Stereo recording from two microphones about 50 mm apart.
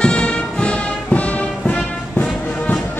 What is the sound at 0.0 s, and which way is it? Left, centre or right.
Music, centre.